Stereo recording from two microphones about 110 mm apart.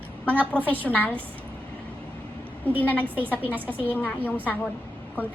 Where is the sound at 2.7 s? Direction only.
15° left (ahead or behind).